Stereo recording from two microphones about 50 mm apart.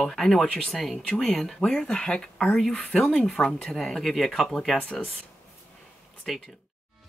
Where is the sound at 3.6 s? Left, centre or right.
Centre.